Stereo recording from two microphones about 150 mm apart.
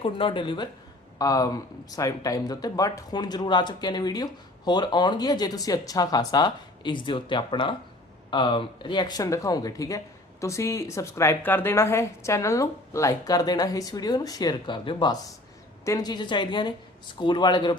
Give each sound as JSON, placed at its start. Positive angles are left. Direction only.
{"t": 0.0, "sound": "speech", "side_deg": 35}